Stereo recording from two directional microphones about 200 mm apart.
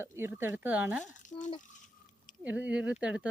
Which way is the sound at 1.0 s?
40° left (ahead or behind).